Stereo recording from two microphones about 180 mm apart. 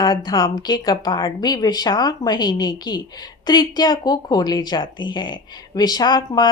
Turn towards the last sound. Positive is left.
turn(degrees=25)  # may be behind; listen again after turning